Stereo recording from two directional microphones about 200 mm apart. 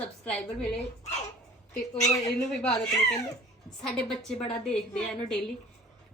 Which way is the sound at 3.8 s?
5° left (ahead or behind).